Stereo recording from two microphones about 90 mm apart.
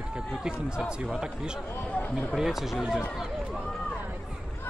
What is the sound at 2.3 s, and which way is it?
Speech, 5° right (ahead or behind).